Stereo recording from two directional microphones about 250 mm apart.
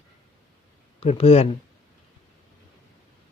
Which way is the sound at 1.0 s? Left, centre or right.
Left.